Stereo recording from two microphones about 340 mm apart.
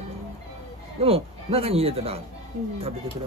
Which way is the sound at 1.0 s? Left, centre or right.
Centre.